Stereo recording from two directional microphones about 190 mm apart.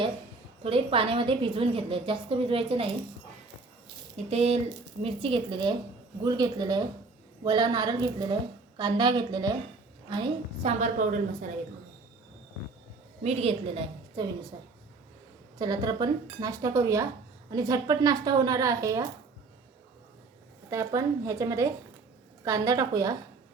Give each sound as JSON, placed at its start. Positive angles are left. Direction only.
{"t": 0.6, "sound": "a woman's voice", "side_deg": -30}
{"t": 4.3, "sound": "a woman's voice", "side_deg": -35}
{"t": 10.8, "sound": "a woman's voice", "side_deg": -40}
{"t": 13.2, "sound": "a woman's voice", "side_deg": -30}
{"t": 15.5, "sound": "a woman's voice", "side_deg": -20}
{"t": 20.7, "sound": "a woman's voice", "side_deg": -15}